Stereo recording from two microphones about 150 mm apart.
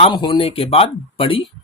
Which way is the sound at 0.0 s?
35° left (ahead or behind).